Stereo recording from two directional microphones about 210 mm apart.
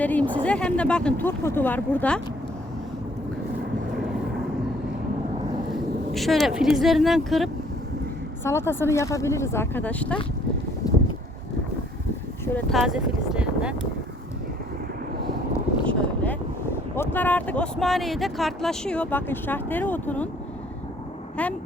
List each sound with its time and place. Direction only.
0.0 s speech: 5° left (ahead or behind)
6.1 s speech: centre (ahead or behind)
8.4 s speech: 10° left (ahead or behind)
10.8 s a sound: 15° left (ahead or behind)
12.5 s speech: centre (ahead or behind)
15.9 s a sound: 5° left (ahead or behind)
16.9 s speech: 10° left (ahead or behind)